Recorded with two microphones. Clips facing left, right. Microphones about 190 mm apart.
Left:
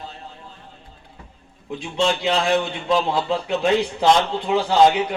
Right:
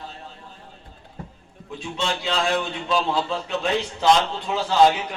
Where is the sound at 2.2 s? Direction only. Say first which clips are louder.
Left 4 dB; 20° left (ahead or behind).